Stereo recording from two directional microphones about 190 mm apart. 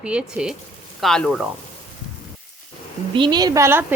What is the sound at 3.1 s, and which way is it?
Speech, 25° right (ahead or behind).